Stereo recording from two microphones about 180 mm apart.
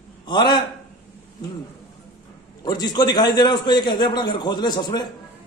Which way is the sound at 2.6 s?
20° left (ahead or behind).